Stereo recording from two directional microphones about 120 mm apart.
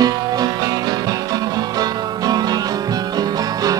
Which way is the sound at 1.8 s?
35° right (ahead or behind).